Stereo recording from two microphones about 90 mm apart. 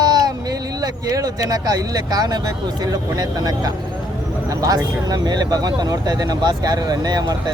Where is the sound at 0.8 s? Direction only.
45° right (ahead or behind).